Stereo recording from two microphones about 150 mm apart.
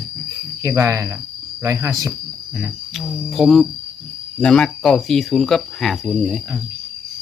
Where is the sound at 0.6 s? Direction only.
20° right (ahead or behind).